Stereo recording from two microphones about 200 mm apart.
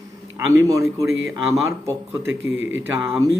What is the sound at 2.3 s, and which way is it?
Speech, 70° right (ahead or behind).